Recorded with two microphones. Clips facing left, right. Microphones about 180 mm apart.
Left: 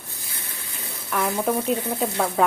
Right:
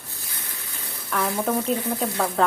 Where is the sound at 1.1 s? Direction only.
5° left (ahead or behind).